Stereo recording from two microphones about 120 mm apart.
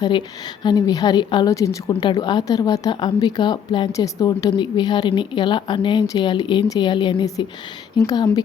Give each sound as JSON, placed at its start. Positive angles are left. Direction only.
{"t": 0.0, "sound": "speech", "side_deg": 40}
{"t": 1.5, "sound": "a woman's voice", "side_deg": 25}
{"t": 1.9, "sound": "speech", "side_deg": 40}